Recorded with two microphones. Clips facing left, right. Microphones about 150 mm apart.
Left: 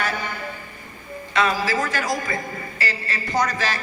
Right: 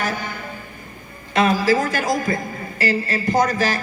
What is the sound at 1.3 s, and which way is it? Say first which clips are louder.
A man's voice: right 5 dB; 50° right (ahead or behind).